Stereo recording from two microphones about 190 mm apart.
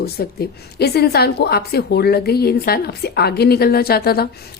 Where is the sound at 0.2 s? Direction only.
55° left (ahead or behind).